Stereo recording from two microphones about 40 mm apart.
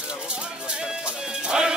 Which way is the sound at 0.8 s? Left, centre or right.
Centre.